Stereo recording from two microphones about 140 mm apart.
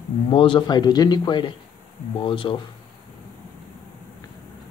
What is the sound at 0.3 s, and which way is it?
A man's voice, 40° left (ahead or behind).